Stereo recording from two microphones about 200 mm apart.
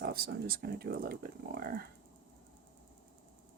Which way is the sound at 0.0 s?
50° right (ahead or behind).